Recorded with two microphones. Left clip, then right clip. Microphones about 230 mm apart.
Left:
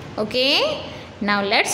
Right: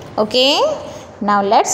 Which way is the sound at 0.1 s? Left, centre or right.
Centre.